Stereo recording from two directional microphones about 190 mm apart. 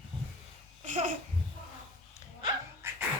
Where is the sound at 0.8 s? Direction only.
40° right (ahead or behind).